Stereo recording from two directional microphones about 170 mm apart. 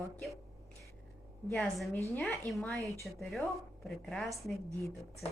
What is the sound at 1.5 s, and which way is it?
A woman's voice, centre (ahead or behind).